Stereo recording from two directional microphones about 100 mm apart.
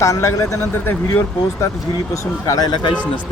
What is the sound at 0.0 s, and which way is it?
Speech, 30° left (ahead or behind).